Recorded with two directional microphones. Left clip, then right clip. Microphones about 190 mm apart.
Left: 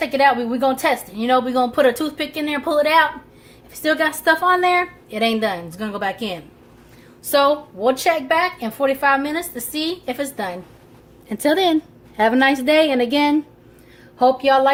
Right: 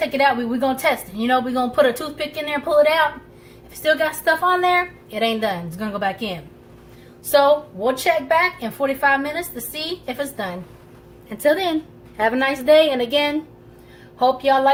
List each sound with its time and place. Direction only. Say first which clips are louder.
0.2 s a woman's voice: left 3 dB; 40° left (ahead or behind)